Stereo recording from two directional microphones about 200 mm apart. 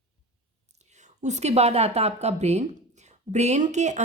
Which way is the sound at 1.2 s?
35° right (ahead or behind).